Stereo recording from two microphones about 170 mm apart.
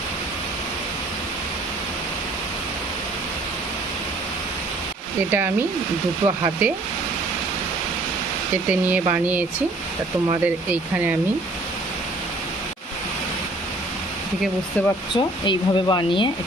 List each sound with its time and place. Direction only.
5.3 s speech: 15° right (ahead or behind)
8.9 s speech: 10° right (ahead or behind)
15.1 s speech: 30° left (ahead or behind)